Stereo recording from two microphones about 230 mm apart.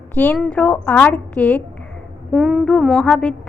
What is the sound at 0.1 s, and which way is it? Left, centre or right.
A woman's voice, centre.